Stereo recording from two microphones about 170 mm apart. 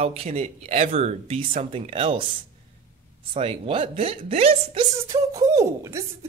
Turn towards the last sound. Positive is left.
turn(degrees=-20)  # may be behind; listen again after turning